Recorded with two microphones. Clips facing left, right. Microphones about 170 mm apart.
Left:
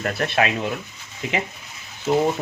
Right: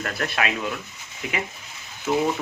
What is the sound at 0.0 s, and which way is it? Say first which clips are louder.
Speech: left 4 dB; 25° left (ahead or behind).